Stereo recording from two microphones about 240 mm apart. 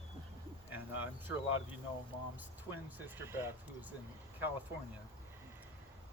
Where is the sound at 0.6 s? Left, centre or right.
Centre.